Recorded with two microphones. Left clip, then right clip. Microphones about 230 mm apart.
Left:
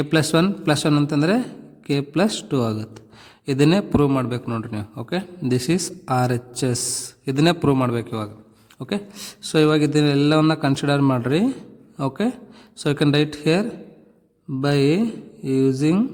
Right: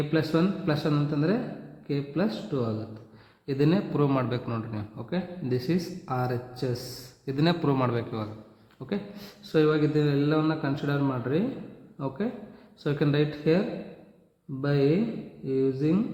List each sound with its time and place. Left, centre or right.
0.1 s a man's voice: left
14.6 s a man's voice: left